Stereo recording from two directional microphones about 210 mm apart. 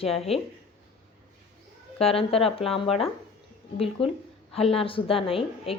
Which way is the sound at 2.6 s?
Centre (ahead or behind).